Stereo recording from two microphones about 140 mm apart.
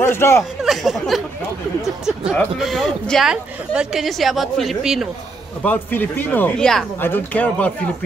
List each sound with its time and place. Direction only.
0.0 s speech: 15° left (ahead or behind)
0.4 s speech: centre (ahead or behind)
2.3 s speech: centre (ahead or behind)
5.6 s speech: 10° left (ahead or behind)